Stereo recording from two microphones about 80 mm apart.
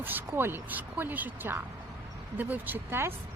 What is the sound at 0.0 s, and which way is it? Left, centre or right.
Speech, right.